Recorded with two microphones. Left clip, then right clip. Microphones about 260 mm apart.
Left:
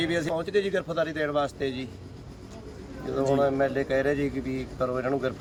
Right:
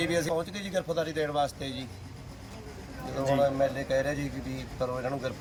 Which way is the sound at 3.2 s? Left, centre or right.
Centre.